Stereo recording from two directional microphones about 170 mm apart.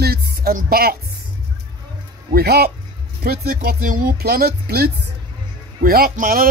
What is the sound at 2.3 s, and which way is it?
Speech, 65° right (ahead or behind).